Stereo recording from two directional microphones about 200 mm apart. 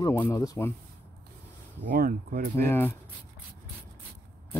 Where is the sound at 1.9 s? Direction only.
45° right (ahead or behind).